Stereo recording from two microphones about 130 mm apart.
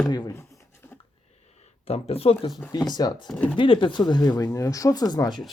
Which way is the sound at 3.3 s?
10° left (ahead or behind).